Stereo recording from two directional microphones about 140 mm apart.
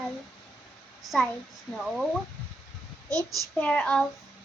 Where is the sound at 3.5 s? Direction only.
10° left (ahead or behind).